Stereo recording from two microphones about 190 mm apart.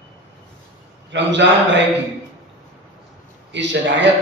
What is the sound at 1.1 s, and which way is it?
Speech, 70° right (ahead or behind).